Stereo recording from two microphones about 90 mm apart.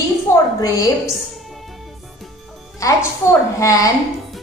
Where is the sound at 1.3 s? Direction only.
Centre (ahead or behind).